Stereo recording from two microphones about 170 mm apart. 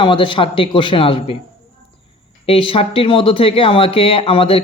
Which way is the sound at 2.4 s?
35° left (ahead or behind).